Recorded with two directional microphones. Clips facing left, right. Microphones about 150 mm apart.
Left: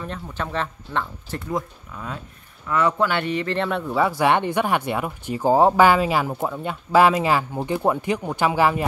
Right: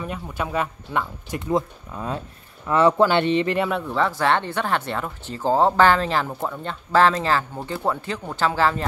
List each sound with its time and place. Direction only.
0.0 s speech: 10° right (ahead or behind)
1.5 s speech: 30° right (ahead or behind)
3.5 s speech: 5° right (ahead or behind)
3.8 s speech: 10° left (ahead or behind)